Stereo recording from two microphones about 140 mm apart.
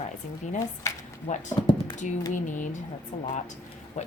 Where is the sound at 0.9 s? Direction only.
20° left (ahead or behind).